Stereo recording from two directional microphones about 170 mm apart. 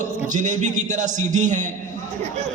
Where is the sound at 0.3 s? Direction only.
50° right (ahead or behind).